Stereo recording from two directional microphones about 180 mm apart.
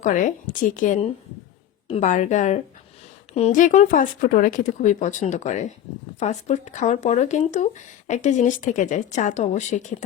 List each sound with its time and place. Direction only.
0.0 s speech: 45° left (ahead or behind)